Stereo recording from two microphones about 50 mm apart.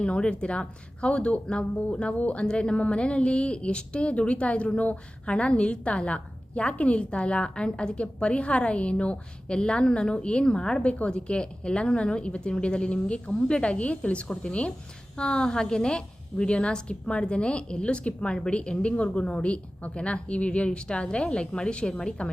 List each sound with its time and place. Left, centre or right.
0.0 s a woman's voice: left